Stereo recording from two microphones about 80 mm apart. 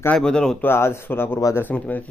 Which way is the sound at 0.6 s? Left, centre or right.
Left.